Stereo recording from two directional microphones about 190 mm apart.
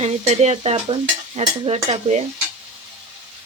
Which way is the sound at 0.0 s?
35° right (ahead or behind).